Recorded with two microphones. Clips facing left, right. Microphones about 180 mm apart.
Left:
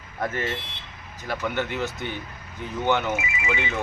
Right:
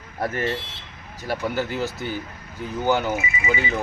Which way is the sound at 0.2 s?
35° right (ahead or behind).